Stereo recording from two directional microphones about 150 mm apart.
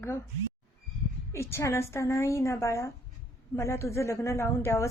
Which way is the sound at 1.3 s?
20° left (ahead or behind).